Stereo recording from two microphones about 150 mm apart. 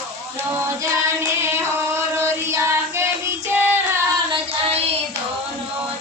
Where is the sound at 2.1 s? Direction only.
20° right (ahead or behind).